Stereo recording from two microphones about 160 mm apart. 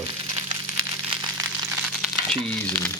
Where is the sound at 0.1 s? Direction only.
25° right (ahead or behind).